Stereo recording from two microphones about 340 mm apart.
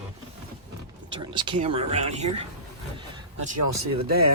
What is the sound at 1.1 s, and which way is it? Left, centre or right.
Speech, centre.